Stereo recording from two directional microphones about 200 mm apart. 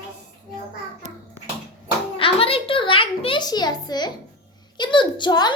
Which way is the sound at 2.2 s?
25° left (ahead or behind).